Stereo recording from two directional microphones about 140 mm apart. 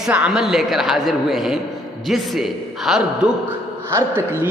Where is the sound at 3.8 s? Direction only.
15° right (ahead or behind).